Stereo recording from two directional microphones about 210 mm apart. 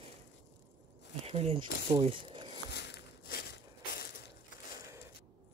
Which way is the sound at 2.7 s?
55° left (ahead or behind).